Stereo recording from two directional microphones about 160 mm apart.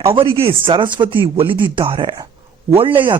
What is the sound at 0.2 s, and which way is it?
Speech, 35° right (ahead or behind).